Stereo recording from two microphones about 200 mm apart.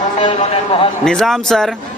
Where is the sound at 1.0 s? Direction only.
5° left (ahead or behind).